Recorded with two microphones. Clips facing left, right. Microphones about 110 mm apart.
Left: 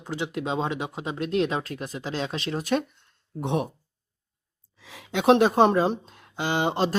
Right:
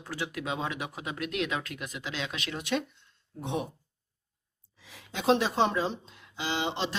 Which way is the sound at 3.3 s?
60° left (ahead or behind).